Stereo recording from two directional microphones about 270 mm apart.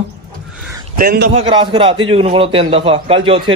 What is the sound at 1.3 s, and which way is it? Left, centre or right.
A man's voice, centre.